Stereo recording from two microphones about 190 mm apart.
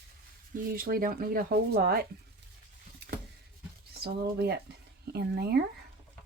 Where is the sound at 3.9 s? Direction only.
55° right (ahead or behind).